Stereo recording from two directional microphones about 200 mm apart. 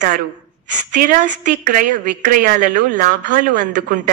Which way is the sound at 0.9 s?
45° right (ahead or behind).